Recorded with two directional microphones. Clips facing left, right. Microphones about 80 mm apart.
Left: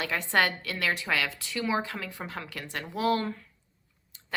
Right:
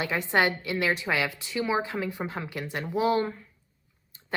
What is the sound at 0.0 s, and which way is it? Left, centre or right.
Speech, right.